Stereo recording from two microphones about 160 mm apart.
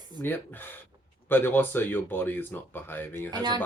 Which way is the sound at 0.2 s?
10° left (ahead or behind).